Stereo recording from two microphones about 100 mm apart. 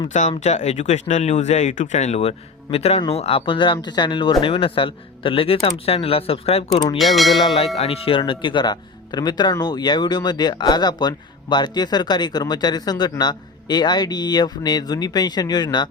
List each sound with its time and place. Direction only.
0.4 s speech: 90° left; by 5.5 s 65° left (ahead or behind)
5.6 s speech: 80° left
7.0 s speech: centre (ahead or behind)
7.8 s speech: 70° left (ahead or behind)
8.2 s speech: 55° left (ahead or behind)